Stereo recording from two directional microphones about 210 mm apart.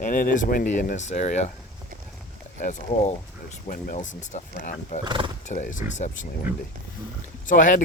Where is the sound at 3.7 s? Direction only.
40° left (ahead or behind).